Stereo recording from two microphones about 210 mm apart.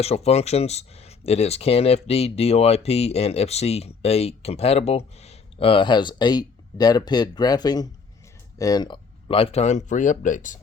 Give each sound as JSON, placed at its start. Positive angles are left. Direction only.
{"t": 0.0, "sound": "speech", "side_deg": 30}